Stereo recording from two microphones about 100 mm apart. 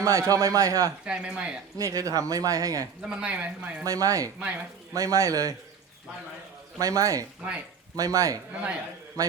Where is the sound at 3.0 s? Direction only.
10° right (ahead or behind).